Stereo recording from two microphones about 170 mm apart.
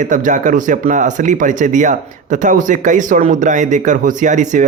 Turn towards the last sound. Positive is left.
turn(degrees=-45)  # may be behind; listen again after turning